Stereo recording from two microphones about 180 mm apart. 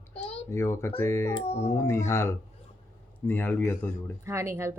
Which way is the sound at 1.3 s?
35° left (ahead or behind).